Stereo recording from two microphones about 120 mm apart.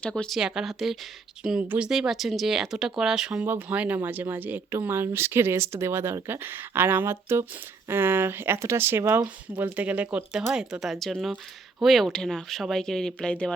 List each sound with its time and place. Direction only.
0.0 s speech: 5° left (ahead or behind)
0.3 s speech: 5° right (ahead or behind)
1.9 s speech: 5° right (ahead or behind)